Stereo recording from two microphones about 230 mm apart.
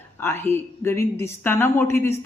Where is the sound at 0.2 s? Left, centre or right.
Centre.